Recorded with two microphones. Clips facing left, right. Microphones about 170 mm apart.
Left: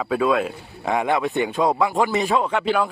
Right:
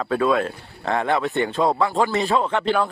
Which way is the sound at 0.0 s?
5° left (ahead or behind).